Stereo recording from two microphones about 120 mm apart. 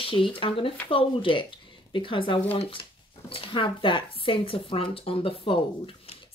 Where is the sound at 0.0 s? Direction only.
45° left (ahead or behind).